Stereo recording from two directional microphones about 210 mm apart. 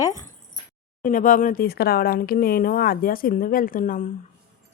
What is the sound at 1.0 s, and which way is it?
Speech, 40° left (ahead or behind).